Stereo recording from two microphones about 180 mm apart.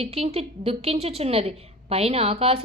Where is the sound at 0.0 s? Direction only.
35° right (ahead or behind).